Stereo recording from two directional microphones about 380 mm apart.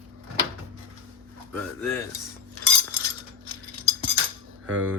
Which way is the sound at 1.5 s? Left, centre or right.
Centre.